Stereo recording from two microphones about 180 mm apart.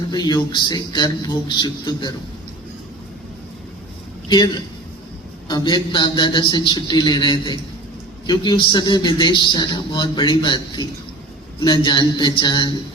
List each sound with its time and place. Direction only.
0.1 s a man's voice: 25° left (ahead or behind)
5.5 s a man's voice: 25° left (ahead or behind)